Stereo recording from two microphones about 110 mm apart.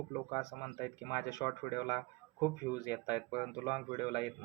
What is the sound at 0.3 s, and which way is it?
Speech, 35° left (ahead or behind).